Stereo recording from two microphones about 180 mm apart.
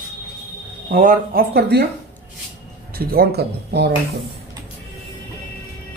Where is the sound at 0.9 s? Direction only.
50° right (ahead or behind); by 1.9 s 65° right (ahead or behind).